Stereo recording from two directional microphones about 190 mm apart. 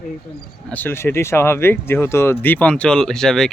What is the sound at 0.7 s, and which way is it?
Speech, 10° left (ahead or behind).